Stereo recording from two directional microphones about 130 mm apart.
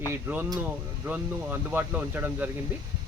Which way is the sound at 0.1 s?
15° right (ahead or behind).